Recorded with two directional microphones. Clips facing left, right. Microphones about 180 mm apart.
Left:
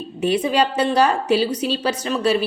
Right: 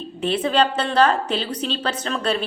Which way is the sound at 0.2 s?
10° left (ahead or behind).